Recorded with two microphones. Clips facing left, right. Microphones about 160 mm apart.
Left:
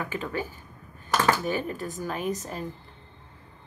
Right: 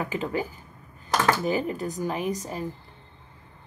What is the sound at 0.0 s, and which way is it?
A woman's voice, 20° right (ahead or behind).